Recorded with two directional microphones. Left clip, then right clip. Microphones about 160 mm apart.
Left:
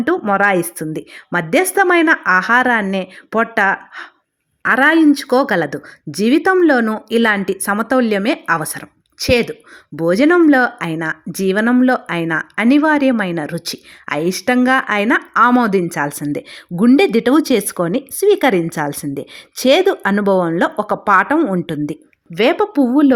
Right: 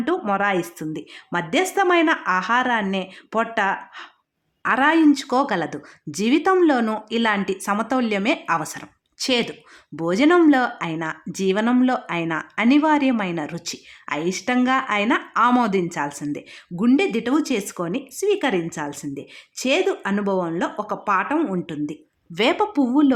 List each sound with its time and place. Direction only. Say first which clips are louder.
0.0 s speech: left 7 dB; 25° left (ahead or behind)
22.4 s speech: left 6 dB; 25° left (ahead or behind)